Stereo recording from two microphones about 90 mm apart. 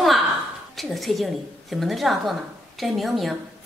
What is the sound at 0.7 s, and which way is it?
A woman's voice, centre (ahead or behind).